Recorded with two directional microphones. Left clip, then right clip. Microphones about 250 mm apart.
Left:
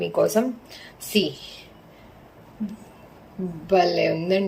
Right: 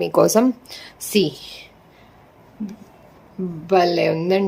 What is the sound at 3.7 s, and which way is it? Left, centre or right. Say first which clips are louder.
Speech: right 3 dB; centre.